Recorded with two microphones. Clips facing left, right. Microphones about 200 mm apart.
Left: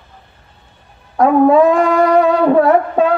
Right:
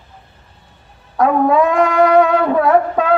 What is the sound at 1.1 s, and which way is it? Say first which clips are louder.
Wind instrument: left 4 dB; 30° left (ahead or behind).